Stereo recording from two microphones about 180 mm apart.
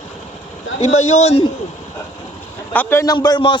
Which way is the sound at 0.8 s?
40° left (ahead or behind).